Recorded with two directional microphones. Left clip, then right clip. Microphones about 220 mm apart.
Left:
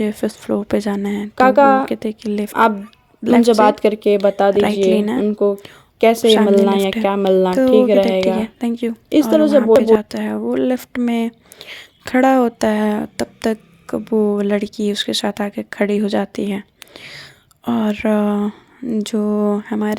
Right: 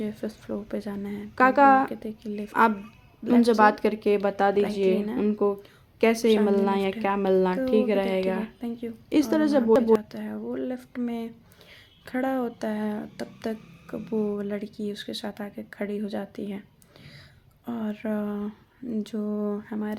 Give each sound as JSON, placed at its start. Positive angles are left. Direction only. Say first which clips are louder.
{"t": 0.0, "sound": "speech", "louder": "left 13 dB", "side_deg": 40}
{"t": 1.4, "sound": "speech", "louder": "left 7 dB", "side_deg": 25}
{"t": 1.9, "sound": "speech", "louder": "left 13 dB", "side_deg": 45}
{"t": 2.5, "sound": "speech", "louder": "left 6 dB", "side_deg": 30}
{"t": 5.6, "sound": "a sound", "louder": "left 9 dB", "side_deg": 30}
{"t": 6.2, "sound": "speech", "louder": "left 10 dB", "side_deg": 40}
{"t": 6.7, "sound": "speech", "louder": "left 9 dB", "side_deg": 30}
{"t": 8.6, "sound": "speech", "louder": "left 13 dB", "side_deg": 45}
{"t": 9.3, "sound": "speech", "louder": "left 11 dB", "side_deg": 25}
{"t": 10.0, "sound": "speech", "louder": "left 13 dB", "side_deg": 45}